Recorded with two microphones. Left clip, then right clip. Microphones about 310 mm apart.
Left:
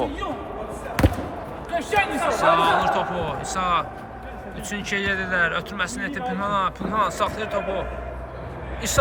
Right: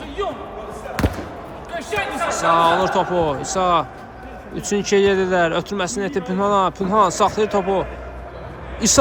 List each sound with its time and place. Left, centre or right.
1.0 s basketball bounce: centre
1.7 s speech: centre
2.6 s speech: centre